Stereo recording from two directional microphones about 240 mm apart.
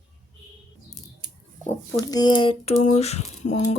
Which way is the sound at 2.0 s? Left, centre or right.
Centre.